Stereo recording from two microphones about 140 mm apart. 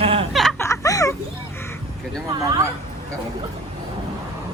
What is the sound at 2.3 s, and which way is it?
Speech, 25° right (ahead or behind).